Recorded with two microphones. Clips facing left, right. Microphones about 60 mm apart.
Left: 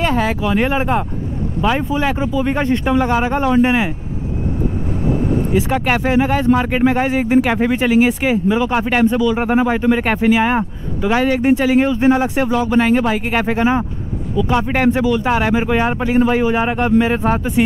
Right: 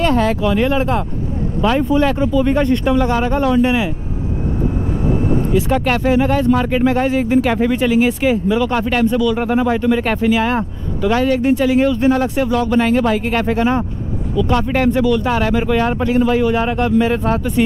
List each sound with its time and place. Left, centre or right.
0.0 s speech: centre
0.6 s speech: left
5.7 s speech: centre